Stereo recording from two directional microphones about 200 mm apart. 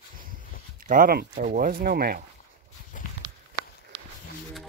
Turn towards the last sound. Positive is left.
turn(degrees=-25)  # may be behind; listen again after turning